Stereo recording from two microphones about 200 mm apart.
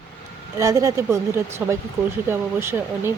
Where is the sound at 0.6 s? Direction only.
15° right (ahead or behind).